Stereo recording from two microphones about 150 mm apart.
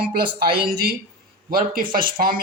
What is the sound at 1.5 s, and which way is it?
Speech, 75° right (ahead or behind).